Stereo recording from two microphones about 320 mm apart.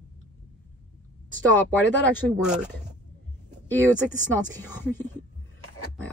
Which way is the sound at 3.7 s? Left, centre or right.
Centre.